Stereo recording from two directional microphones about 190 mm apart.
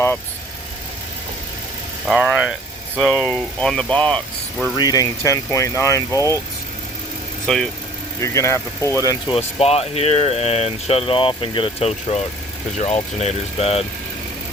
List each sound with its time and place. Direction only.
2.0 s speech: 5° right (ahead or behind)
4.6 s speech: 20° left (ahead or behind)
7.4 s speech: centre (ahead or behind)
8.2 s speech: 15° left (ahead or behind)
9.0 s speech: 25° left (ahead or behind)